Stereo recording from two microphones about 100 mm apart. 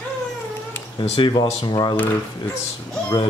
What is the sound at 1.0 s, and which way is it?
Speech, 55° left (ahead or behind).